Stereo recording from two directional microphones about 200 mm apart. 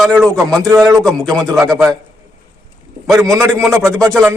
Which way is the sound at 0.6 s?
15° right (ahead or behind).